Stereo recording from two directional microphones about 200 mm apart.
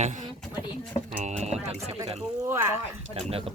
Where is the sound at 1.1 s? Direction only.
35° right (ahead or behind).